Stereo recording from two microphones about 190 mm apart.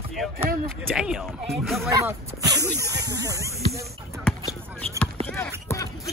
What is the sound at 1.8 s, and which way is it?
Speech, 15° right (ahead or behind).